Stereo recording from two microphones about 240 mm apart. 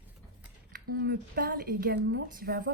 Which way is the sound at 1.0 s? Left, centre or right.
Right.